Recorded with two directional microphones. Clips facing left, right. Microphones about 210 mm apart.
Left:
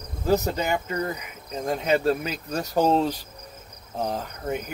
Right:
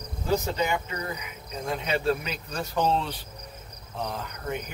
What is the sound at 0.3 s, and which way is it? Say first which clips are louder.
Speech: left 3 dB; 45° left (ahead or behind).